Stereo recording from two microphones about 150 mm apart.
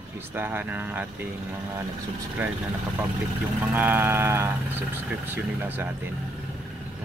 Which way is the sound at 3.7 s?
15° right (ahead or behind).